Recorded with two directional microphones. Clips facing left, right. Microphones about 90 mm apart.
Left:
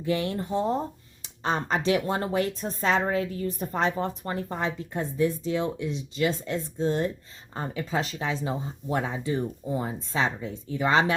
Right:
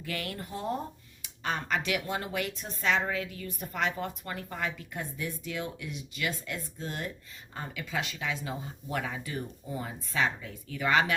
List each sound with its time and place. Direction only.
0.0 s speech: 25° left (ahead or behind)